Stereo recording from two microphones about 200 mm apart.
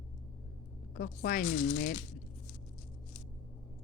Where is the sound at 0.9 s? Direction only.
50° left (ahead or behind).